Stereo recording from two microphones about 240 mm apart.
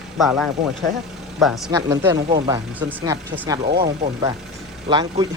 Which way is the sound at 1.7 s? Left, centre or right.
Centre.